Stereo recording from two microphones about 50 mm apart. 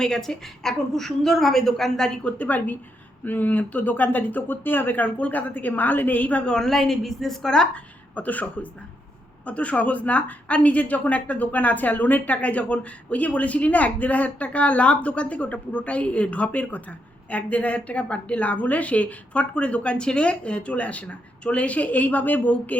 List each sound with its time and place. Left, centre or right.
0.0 s a woman's voice: centre
2.2 s speech: left
5.0 s speech: left
6.4 s a woman's voice: centre
7.5 s a woman's voice: centre
8.1 s a woman's voice: left